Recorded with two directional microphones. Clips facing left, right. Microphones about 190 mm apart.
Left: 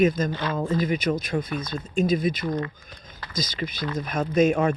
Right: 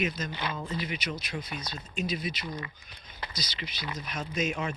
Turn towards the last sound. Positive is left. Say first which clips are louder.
# left 12 dB
turn(degrees=55)  # may be behind; listen again after turning